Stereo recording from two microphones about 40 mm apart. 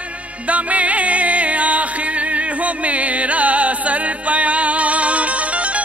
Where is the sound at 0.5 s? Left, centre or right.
Right.